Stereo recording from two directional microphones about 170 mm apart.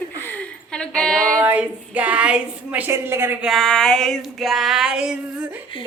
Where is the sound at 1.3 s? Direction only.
10° right (ahead or behind).